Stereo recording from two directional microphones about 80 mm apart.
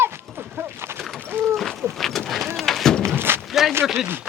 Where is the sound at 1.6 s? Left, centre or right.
Centre.